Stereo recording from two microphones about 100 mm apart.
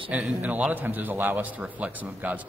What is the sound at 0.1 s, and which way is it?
A man's voice, 15° right (ahead or behind).